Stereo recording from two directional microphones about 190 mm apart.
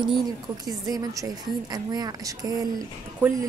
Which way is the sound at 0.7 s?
20° right (ahead or behind).